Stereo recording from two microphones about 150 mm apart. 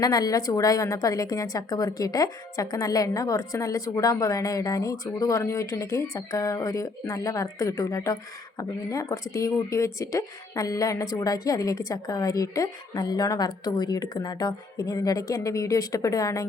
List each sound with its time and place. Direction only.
0.0 s a woman's voice: 25° left (ahead or behind)